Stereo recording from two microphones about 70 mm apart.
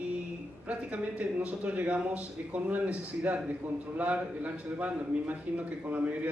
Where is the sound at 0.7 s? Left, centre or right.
Centre.